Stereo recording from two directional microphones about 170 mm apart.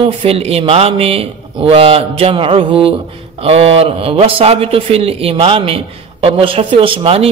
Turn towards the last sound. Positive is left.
turn(degrees=-35)  # may be behind; listen again after turning